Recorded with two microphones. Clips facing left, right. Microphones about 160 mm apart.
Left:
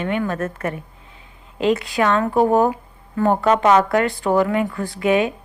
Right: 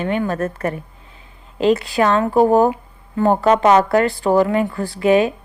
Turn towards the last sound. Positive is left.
turn(degrees=-35)  # may be behind; listen again after turning